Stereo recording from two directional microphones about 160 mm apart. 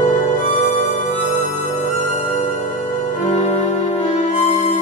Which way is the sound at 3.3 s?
45° left (ahead or behind).